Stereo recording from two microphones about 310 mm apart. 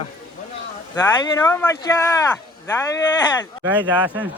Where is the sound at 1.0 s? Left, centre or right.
Centre.